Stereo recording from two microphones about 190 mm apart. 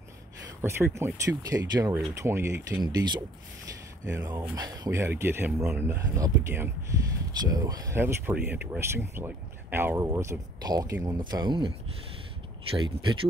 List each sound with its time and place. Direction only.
0.6 s speech: 15° right (ahead or behind)
12.7 s speech: 25° right (ahead or behind)